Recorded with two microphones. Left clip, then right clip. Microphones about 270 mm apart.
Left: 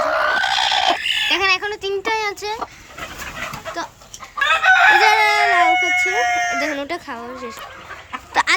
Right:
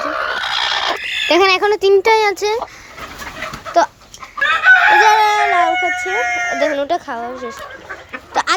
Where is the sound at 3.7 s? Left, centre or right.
Centre.